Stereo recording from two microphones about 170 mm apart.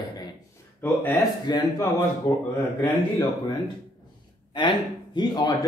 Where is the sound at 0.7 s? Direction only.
10° left (ahead or behind).